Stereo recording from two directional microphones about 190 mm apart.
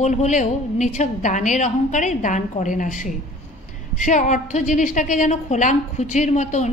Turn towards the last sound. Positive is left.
turn(degrees=40)  # may be behind; listen again after turning